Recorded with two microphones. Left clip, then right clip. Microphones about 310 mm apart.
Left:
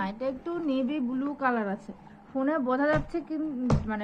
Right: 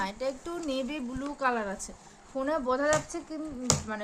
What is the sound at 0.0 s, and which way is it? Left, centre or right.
Speech, centre.